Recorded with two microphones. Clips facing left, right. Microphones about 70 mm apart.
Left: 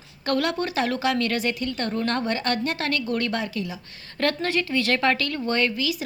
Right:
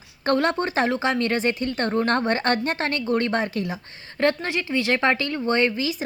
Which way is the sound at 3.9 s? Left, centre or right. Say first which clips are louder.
Right 3 dB; right.